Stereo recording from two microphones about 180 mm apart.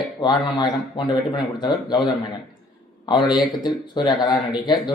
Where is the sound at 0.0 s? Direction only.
25° left (ahead or behind).